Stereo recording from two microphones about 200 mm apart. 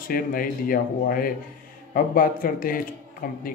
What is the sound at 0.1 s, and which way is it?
Speech, 45° left (ahead or behind).